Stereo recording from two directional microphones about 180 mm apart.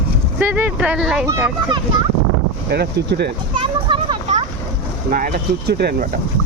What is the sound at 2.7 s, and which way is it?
Speech, 65° right (ahead or behind).